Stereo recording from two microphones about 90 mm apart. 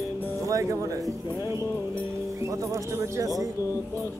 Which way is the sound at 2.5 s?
35° right (ahead or behind).